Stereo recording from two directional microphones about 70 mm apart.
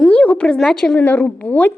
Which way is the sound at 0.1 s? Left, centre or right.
Centre.